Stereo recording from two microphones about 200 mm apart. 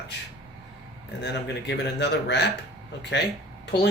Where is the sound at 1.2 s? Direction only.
60° left (ahead or behind).